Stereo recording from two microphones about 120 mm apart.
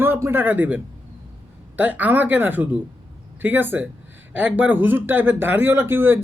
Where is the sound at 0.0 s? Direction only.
20° right (ahead or behind).